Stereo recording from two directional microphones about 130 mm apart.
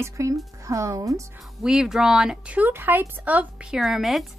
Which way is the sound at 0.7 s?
25° right (ahead or behind).